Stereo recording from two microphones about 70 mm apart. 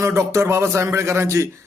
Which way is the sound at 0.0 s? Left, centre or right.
Right.